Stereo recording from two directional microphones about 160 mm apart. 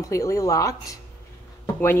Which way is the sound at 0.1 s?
20° left (ahead or behind).